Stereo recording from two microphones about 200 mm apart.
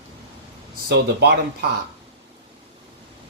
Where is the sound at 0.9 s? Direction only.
55° right (ahead or behind).